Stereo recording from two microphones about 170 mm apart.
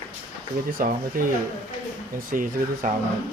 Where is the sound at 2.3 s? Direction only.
55° right (ahead or behind).